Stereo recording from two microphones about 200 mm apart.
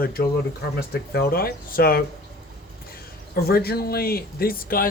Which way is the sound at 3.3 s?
50° left (ahead or behind).